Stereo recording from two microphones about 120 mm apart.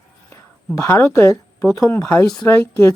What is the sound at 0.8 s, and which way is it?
Speech, 20° left (ahead or behind).